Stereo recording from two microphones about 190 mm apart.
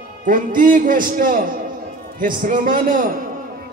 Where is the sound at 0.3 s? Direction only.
45° right (ahead or behind).